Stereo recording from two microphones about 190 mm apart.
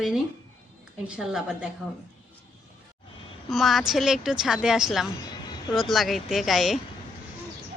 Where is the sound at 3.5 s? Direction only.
Centre (ahead or behind).